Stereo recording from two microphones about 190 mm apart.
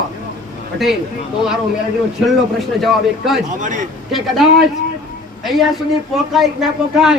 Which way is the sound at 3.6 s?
40° right (ahead or behind).